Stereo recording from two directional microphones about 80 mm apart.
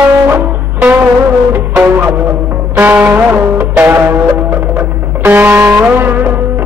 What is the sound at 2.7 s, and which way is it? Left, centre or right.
Music, right.